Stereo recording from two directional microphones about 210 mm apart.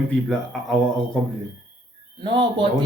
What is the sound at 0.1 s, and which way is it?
Speech, 5° left (ahead or behind).